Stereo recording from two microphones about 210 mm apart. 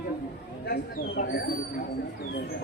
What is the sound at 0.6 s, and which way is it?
Speech, 45° left (ahead or behind).